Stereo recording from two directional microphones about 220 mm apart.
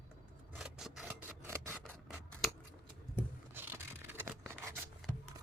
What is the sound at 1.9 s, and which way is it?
Scissors, 10° right (ahead or behind).